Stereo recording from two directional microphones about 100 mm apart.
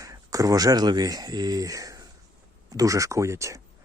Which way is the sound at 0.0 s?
35° right (ahead or behind).